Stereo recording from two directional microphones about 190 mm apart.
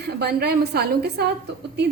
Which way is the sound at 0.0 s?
55° right (ahead or behind).